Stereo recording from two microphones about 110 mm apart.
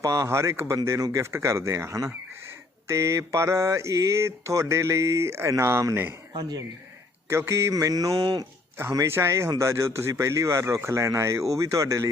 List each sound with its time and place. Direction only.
0.0 s mantra: 30° right (ahead or behind)
6.3 s speech: 40° right (ahead or behind)
7.3 s mantra: 25° right (ahead or behind)
8.9 s mantra: 25° right (ahead or behind)